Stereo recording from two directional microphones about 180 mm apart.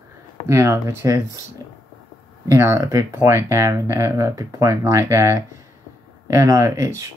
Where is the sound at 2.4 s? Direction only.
15° right (ahead or behind).